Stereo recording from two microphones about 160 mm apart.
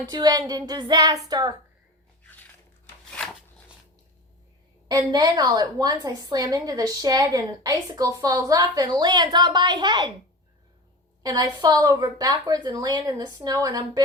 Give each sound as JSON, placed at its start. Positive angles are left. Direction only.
{"t": 0.1, "sound": "a woman's voice", "side_deg": -25}
{"t": 2.2, "sound": "biting", "side_deg": 10}
{"t": 4.9, "sound": "a woman's voice", "side_deg": -25}
{"t": 11.2, "sound": "a woman's voice", "side_deg": -25}